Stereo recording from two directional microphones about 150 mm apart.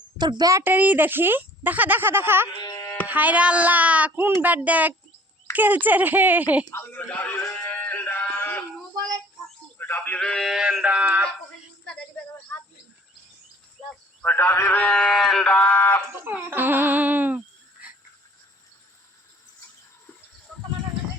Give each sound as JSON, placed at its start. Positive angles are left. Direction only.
{"t": 0.2, "sound": "speech", "side_deg": -30}
{"t": 2.6, "sound": "carnatic music", "side_deg": 30}
{"t": 3.1, "sound": "speech", "side_deg": -10}
{"t": 6.7, "sound": "music", "side_deg": 15}
{"t": 9.7, "sound": "a sound", "side_deg": 15}
{"t": 10.2, "sound": "a sound", "side_deg": 5}
{"t": 12.1, "sound": "a sound", "side_deg": 5}
{"t": 14.2, "sound": "speech", "side_deg": 15}
{"t": 16.2, "sound": "speech", "side_deg": -15}
{"t": 20.5, "sound": "horse", "side_deg": 0}